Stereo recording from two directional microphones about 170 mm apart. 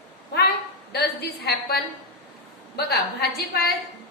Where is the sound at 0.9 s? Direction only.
70° left (ahead or behind).